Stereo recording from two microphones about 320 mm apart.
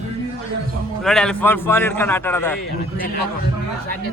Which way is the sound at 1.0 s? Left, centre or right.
Centre.